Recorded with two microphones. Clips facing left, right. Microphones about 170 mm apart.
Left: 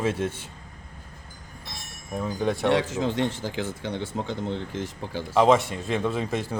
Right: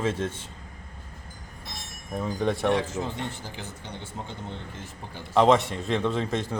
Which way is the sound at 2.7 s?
90° left.